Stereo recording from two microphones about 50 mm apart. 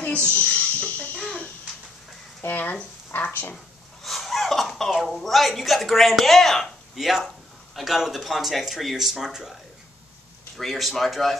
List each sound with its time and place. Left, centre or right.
0.4 s bird: left
2.4 s speech: left
4.0 s speech: centre
7.0 s speech: centre
10.6 s speech: centre